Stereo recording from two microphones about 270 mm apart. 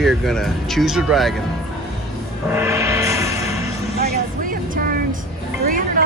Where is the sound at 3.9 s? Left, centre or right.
Right.